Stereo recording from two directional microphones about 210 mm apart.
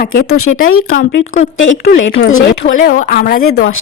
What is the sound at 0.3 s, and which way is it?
Speech, 90° left.